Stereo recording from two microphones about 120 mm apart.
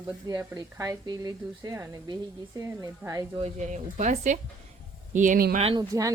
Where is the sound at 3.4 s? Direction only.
80° right.